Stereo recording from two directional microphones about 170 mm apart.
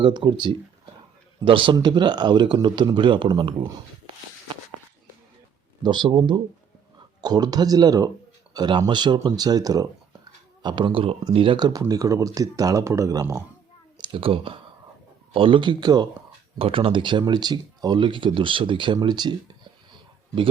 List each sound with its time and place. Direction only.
0.0 s speech: 25° right (ahead or behind)
5.8 s speech: 25° right (ahead or behind)
14.0 s speech: 30° right (ahead or behind)